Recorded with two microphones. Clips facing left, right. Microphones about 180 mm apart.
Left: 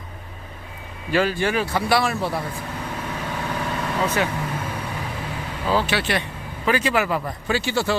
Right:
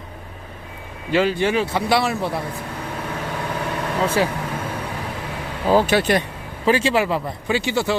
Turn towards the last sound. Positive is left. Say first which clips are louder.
# right 2 dB
turn(degrees=-20)  # may be behind; listen again after turning